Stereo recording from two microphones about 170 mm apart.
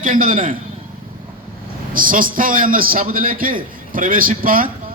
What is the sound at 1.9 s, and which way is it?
A man's voice, 55° right (ahead or behind).